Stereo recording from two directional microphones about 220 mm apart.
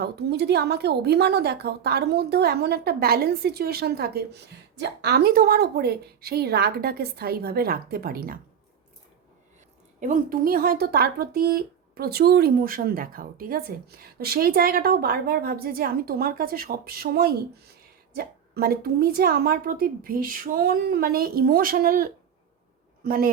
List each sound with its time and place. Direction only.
0.0 s a woman's voice: 50° right (ahead or behind)
10.0 s a woman's voice: 40° right (ahead or behind)